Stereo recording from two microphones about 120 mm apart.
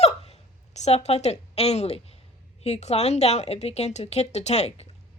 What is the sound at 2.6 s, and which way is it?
A woman's voice, 60° left (ahead or behind).